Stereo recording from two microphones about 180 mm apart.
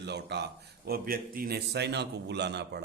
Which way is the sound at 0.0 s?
70° right (ahead or behind).